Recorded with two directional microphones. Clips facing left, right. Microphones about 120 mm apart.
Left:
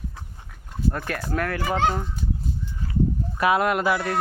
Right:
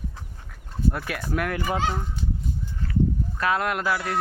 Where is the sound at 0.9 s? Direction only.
5° right (ahead or behind).